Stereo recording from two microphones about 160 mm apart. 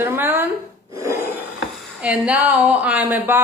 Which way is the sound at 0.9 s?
15° right (ahead or behind).